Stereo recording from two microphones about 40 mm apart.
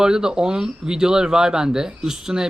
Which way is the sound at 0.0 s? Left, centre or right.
Centre.